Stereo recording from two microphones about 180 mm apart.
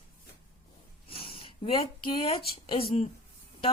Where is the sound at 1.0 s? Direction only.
30° left (ahead or behind).